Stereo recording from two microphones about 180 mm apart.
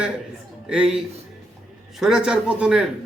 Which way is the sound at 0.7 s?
5° right (ahead or behind).